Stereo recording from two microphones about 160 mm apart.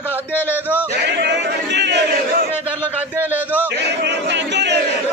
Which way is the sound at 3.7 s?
90° right.